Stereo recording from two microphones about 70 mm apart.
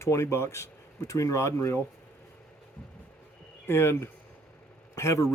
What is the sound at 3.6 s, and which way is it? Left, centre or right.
Speech, left.